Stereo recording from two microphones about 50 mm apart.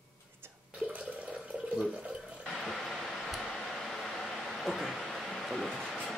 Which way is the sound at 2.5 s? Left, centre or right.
Centre.